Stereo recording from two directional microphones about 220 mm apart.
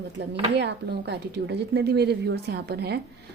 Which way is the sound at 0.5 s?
50° right (ahead or behind).